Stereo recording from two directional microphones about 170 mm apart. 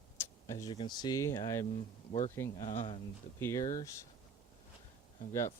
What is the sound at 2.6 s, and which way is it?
Speech, 45° left (ahead or behind).